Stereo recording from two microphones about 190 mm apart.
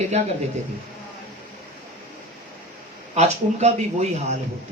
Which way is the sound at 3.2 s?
35° right (ahead or behind).